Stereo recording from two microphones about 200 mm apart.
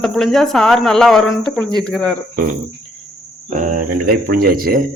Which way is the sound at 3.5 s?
40° right (ahead or behind).